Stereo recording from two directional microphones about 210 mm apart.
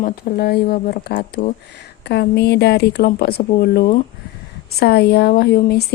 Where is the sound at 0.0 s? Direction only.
45° left (ahead or behind).